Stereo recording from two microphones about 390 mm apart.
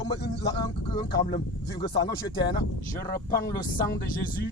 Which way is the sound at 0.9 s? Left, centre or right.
Centre.